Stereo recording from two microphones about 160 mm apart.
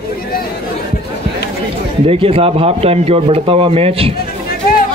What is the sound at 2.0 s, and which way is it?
A man's voice, 35° right (ahead or behind).